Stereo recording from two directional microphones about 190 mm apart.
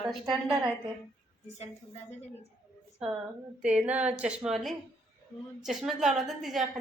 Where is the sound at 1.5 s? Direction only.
35° left (ahead or behind).